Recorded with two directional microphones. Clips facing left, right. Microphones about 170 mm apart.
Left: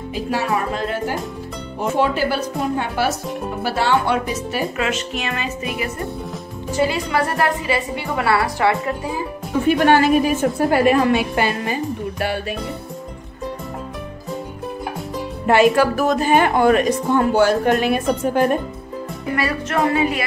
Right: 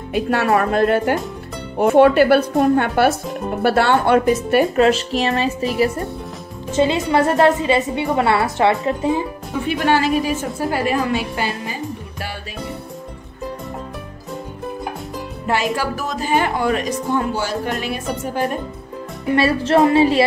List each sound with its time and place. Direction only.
0.1 s speech: 60° right (ahead or behind)
4.7 s speech: 35° right (ahead or behind)
6.7 s a woman's voice: 25° right (ahead or behind)
9.7 s a woman's voice: 50° left (ahead or behind)
15.4 s a woman's voice: 60° left (ahead or behind)
19.3 s a woman's voice: 30° right (ahead or behind)